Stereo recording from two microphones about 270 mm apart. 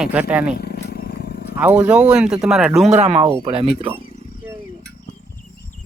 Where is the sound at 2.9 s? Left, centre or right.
Right.